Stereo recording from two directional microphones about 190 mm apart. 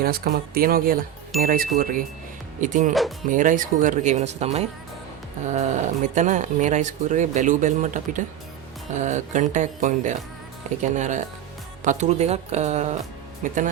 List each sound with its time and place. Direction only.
0.0 s speech: 50° right (ahead or behind)